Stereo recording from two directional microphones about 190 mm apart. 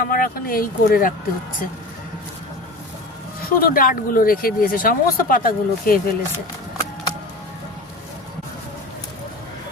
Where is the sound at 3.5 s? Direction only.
50° left (ahead or behind).